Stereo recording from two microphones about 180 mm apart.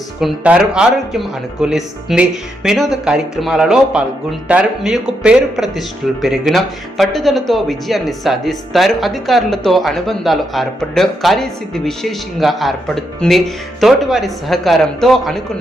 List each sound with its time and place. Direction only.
0.2 s speech: 5° right (ahead or behind)